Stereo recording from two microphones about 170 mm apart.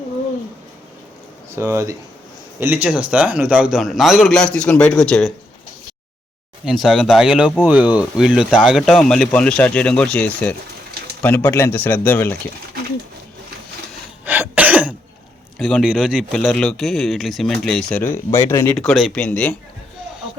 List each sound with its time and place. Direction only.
1.5 s a man's voice: 15° right (ahead or behind); by 5.3 s 5° left (ahead or behind)
6.7 s a man's voice: centre (ahead or behind)
14.3 s cough: 10° right (ahead or behind)
15.5 s a man's voice: 5° left (ahead or behind)